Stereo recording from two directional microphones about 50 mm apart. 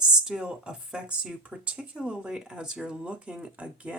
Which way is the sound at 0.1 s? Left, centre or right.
Centre.